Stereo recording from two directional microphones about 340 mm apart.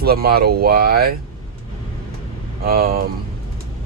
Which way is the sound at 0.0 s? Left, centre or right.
Right.